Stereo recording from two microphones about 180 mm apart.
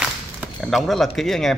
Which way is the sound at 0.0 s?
Centre (ahead or behind).